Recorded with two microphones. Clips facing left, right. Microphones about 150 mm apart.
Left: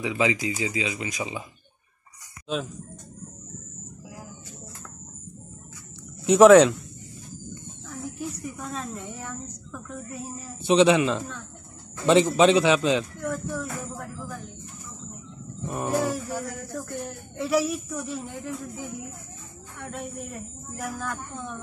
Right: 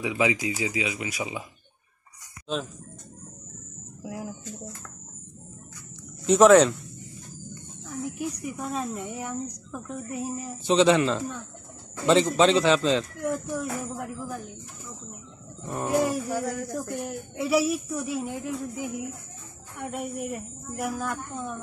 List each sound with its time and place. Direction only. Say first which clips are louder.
0.0 s speech: even; 15° right (ahead or behind)
6.2 s a man's voice: left 3 dB; 10° left (ahead or behind)
8.2 s speech: right 2 dB; 15° right (ahead or behind)
10.7 s a man's voice: left 1 dB; 15° left (ahead or behind)
13.2 s speech: right 1 dB; 15° right (ahead or behind)
15.9 s speech: right 3 dB; 15° right (ahead or behind)